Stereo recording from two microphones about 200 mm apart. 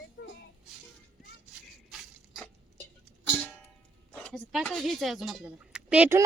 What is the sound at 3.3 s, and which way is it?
Music, 5° left (ahead or behind).